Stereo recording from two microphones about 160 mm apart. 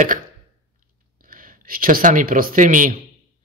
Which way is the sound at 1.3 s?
60° right (ahead or behind).